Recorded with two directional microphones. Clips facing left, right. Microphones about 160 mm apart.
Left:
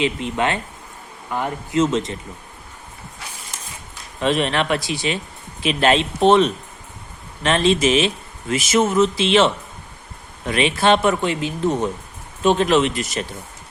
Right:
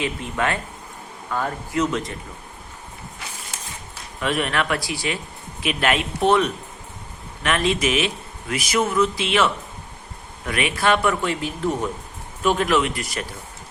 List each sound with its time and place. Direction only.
0.0 s a man's voice: 20° left (ahead or behind)
4.2 s a man's voice: 25° left (ahead or behind)